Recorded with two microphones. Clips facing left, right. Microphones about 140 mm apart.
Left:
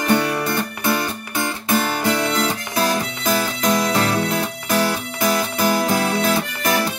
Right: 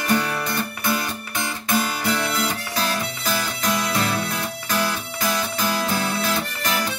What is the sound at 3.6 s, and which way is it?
Music, 40° left (ahead or behind).